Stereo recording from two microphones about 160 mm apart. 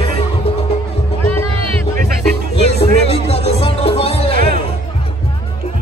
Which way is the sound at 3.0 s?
40° left (ahead or behind).